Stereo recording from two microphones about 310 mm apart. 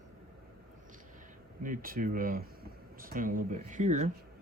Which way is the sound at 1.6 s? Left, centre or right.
Right.